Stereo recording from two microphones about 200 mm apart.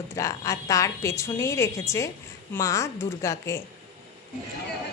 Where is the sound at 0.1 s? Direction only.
15° left (ahead or behind).